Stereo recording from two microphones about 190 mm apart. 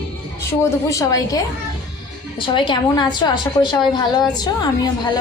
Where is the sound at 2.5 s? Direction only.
25° left (ahead or behind).